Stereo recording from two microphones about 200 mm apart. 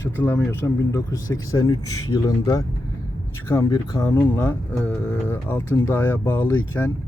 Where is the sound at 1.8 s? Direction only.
90° left.